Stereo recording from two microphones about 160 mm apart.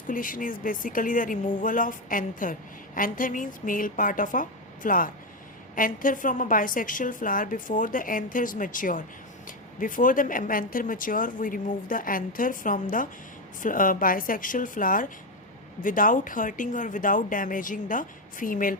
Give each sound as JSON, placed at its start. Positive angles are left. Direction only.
{"t": 0.1, "sound": "a woman's voice", "side_deg": 60}